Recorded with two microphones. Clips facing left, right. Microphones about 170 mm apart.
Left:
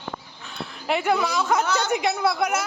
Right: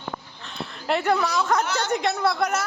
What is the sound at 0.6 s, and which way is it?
A man's voice, centre (ahead or behind).